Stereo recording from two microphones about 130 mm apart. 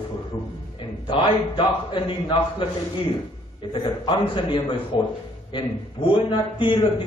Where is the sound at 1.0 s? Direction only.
40° left (ahead or behind).